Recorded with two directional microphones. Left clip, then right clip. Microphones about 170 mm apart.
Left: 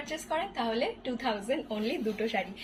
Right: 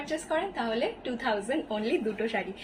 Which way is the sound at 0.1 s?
30° right (ahead or behind).